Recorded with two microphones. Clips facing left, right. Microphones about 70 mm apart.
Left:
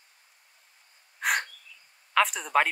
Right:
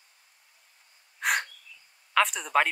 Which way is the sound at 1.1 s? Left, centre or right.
Centre.